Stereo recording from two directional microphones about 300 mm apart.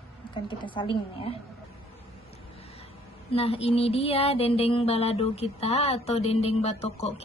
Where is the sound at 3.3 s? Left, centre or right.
Centre.